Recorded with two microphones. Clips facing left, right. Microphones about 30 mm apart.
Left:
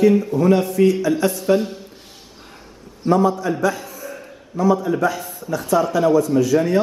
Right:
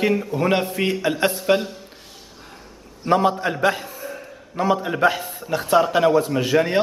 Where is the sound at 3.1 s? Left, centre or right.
Right.